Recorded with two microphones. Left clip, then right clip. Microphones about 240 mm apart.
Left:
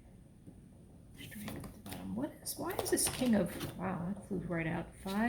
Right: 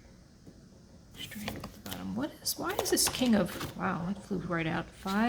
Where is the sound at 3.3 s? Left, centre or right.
Right.